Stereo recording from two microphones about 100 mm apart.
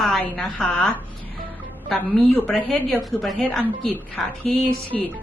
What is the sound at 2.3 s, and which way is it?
Speech, 20° left (ahead or behind).